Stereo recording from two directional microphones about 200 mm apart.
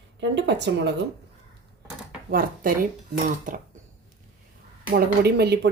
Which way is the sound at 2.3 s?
45° right (ahead or behind).